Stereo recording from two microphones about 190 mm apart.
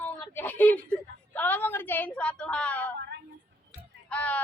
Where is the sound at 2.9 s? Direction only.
60° right (ahead or behind).